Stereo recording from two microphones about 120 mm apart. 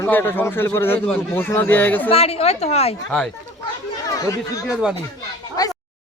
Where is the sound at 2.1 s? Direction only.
55° left (ahead or behind).